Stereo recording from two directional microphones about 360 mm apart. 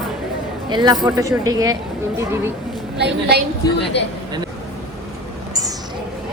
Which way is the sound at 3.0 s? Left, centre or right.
Right.